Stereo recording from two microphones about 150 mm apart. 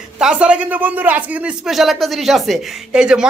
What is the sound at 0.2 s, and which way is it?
Speech, 5° right (ahead or behind).